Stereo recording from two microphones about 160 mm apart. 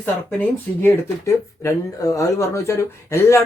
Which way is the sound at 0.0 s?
15° left (ahead or behind).